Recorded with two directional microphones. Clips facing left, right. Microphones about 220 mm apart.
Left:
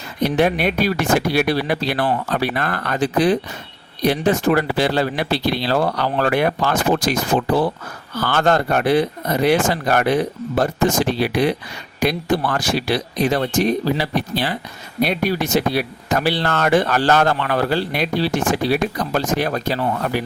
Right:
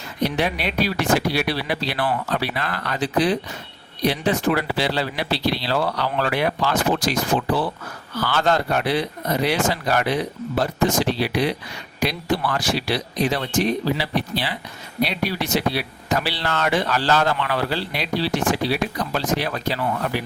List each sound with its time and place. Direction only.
0.2 s speech: 50° left (ahead or behind)